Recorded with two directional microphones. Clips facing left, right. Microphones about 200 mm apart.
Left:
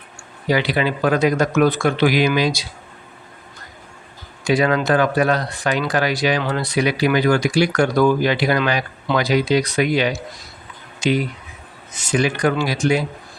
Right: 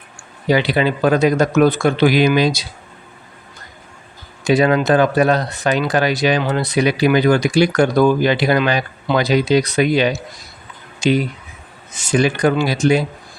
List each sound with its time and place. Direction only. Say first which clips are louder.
0.4 s speech: right 3 dB; 25° right (ahead or behind)
4.4 s speech: right 3 dB; 25° right (ahead or behind)